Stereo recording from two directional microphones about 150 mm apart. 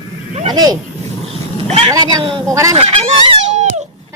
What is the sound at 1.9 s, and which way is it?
Speech, 25° right (ahead or behind).